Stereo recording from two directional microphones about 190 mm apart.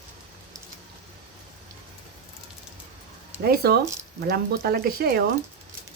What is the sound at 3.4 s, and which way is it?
Speech, 55° right (ahead or behind).